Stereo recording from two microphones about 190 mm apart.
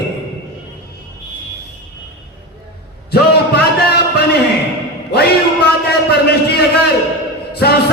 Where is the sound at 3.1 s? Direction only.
55° left (ahead or behind).